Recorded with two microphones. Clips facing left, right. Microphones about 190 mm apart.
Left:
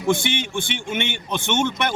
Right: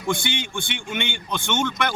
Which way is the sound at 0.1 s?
20° left (ahead or behind).